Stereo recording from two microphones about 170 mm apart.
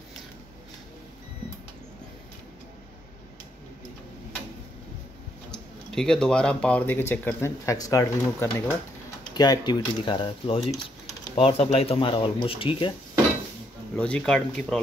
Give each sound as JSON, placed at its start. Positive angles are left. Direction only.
{"t": 5.5, "sound": "speech", "side_deg": 5}
{"t": 13.9, "sound": "speech", "side_deg": 5}